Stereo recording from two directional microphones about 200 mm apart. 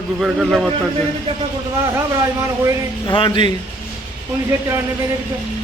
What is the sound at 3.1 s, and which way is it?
Speech, 25° left (ahead or behind).